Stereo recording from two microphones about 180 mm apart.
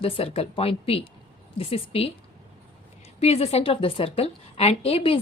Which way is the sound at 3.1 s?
35° left (ahead or behind).